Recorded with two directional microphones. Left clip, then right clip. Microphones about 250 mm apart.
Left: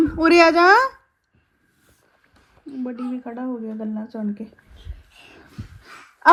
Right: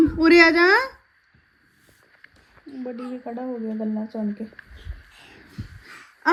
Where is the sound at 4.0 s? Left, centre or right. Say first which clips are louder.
Right 1 dB; left.